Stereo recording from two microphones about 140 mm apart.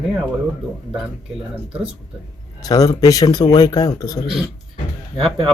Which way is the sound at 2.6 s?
25° left (ahead or behind).